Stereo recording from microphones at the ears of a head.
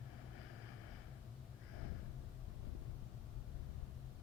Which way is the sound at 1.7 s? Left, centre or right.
Left.